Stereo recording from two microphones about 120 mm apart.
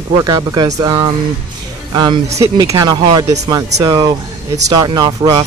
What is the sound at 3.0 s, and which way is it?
Speech, 45° right (ahead or behind).